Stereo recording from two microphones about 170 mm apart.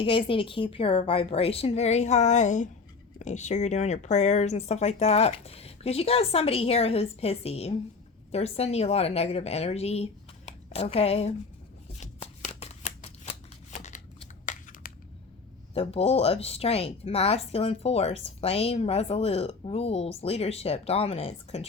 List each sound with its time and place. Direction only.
0.0 s speech: 30° left (ahead or behind)
11.9 s shuffling cards: 40° left (ahead or behind)
15.7 s speech: 35° left (ahead or behind)